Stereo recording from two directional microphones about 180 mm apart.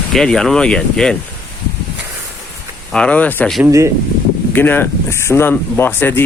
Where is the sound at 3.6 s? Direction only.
15° right (ahead or behind).